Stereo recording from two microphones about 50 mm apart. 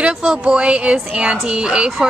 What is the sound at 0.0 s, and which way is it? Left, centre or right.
A woman's voice, centre.